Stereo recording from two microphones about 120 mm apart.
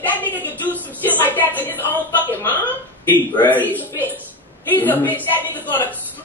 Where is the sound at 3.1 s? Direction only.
15° left (ahead or behind).